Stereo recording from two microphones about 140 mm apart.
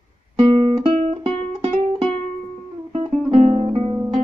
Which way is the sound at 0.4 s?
45° right (ahead or behind).